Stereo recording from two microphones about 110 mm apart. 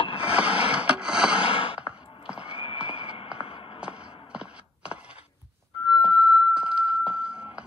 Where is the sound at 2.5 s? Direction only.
55° left (ahead or behind).